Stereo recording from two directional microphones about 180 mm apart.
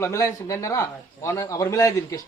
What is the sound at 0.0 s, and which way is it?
Speech, 15° left (ahead or behind).